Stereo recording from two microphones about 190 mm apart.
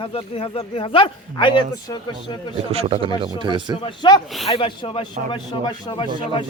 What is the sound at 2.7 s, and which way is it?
A man's voice, 30° right (ahead or behind).